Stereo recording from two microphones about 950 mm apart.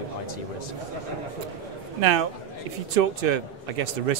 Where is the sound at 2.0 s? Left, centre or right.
Right.